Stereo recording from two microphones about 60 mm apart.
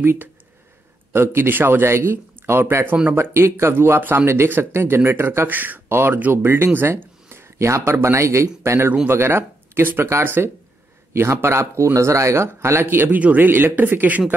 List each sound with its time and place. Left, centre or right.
0.0 s a man's voice: right
5.5 s a man's voice: right